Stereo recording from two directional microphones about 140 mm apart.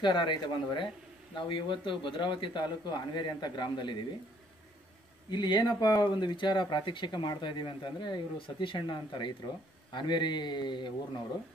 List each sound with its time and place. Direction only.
0.0 s speech: 30° left (ahead or behind)
5.3 s speech: 30° left (ahead or behind)